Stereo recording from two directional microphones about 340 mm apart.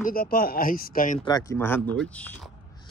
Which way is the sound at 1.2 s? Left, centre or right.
Centre.